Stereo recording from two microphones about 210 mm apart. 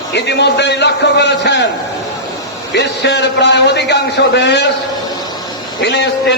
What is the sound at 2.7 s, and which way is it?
A man's voice, 55° left (ahead or behind).